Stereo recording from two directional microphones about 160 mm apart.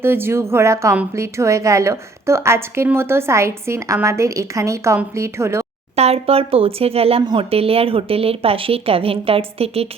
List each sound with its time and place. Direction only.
0.0 s a woman's voice: 15° right (ahead or behind)
6.0 s a woman's voice: 40° right (ahead or behind)